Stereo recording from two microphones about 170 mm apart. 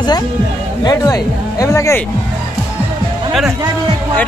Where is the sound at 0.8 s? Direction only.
20° left (ahead or behind).